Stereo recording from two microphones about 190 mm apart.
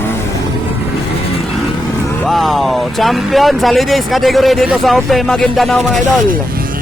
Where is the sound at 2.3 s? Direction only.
Centre (ahead or behind).